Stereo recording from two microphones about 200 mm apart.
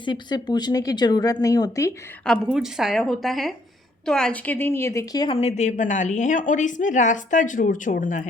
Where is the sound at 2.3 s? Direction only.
Centre (ahead or behind).